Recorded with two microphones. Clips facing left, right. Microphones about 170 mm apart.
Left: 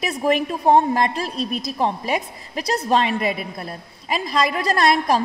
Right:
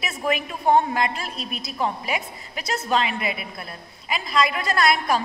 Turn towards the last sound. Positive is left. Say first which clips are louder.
# left 3 dB
turn(degrees=35)  # may be behind; listen again after turning